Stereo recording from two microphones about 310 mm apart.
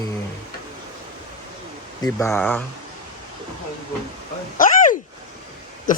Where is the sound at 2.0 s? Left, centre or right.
Centre.